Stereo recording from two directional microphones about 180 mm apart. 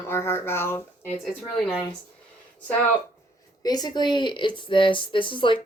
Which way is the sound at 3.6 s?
20° left (ahead or behind).